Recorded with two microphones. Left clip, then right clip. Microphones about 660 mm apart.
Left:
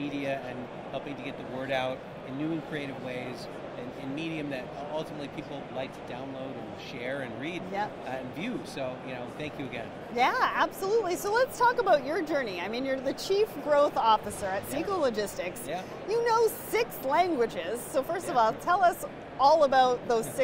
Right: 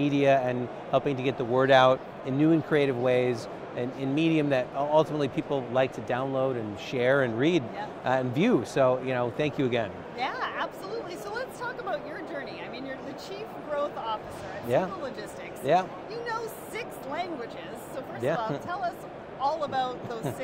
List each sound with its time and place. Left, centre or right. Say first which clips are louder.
0.0 s speech: right 10 dB; right
10.1 s a woman's voice: left 7 dB; left
15.0 s a woman's voice: left 8 dB; left
15.7 s speech: right 16 dB; right
16.1 s a woman's voice: left 8 dB; left